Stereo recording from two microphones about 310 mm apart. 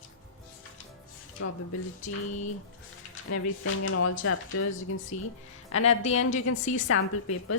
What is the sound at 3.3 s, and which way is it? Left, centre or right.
A woman's voice, left.